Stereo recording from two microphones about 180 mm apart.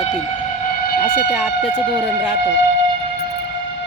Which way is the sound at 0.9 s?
55° left (ahead or behind).